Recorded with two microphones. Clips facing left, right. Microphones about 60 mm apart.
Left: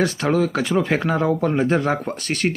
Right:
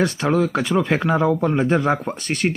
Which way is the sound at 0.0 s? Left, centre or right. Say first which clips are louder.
Even; centre.